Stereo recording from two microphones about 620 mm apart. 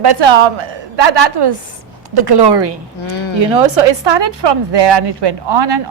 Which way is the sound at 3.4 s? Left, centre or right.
Right.